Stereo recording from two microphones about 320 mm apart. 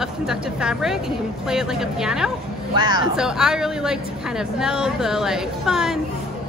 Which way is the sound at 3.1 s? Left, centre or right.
Centre.